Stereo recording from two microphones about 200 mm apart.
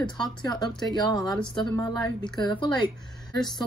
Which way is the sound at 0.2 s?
20° left (ahead or behind).